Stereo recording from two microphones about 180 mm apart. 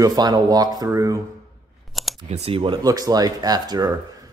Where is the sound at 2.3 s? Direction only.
30° right (ahead or behind).